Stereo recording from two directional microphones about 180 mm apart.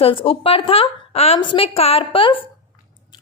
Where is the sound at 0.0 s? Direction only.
30° left (ahead or behind).